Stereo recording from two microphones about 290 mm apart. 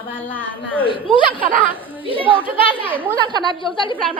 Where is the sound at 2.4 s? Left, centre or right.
Centre.